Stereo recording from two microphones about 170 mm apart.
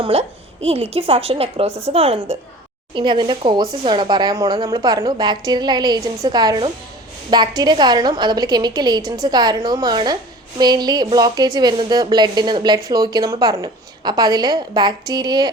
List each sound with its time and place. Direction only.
0.0 s a woman's voice: 35° right (ahead or behind)